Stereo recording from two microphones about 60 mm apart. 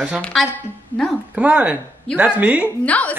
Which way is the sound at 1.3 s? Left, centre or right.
Centre.